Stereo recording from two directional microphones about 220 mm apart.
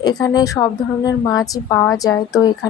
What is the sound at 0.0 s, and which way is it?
Speech, 20° left (ahead or behind).